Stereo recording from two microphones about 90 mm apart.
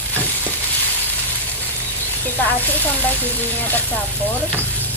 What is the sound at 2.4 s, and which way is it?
Speech, 20° left (ahead or behind).